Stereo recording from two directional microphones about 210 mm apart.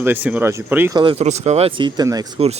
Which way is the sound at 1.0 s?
25° right (ahead or behind).